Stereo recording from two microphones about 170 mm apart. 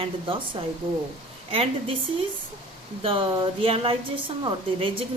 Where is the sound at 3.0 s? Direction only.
35° right (ahead or behind).